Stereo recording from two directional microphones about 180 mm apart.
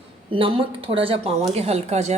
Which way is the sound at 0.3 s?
30° right (ahead or behind).